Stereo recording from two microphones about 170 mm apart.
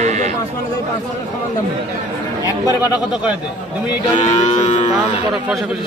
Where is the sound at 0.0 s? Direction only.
40° right (ahead or behind).